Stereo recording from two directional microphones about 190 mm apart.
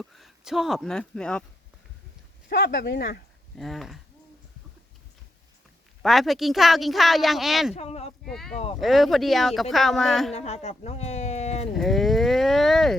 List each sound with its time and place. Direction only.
0.0 s speech: centre (ahead or behind)
2.5 s speech: 60° left (ahead or behind)
3.6 s speech: centre (ahead or behind)
6.0 s speech: centre (ahead or behind)
7.8 s speech: 35° left (ahead or behind)
8.2 s speech: centre (ahead or behind)
10.3 s speech: 35° left (ahead or behind)
11.7 s speech: centre (ahead or behind)